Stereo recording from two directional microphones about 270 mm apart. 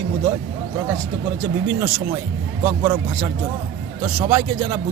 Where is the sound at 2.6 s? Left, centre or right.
Centre.